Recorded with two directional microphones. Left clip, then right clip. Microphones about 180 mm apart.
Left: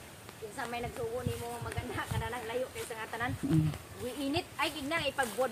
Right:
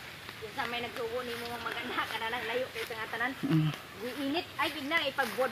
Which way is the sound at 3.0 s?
25° right (ahead or behind).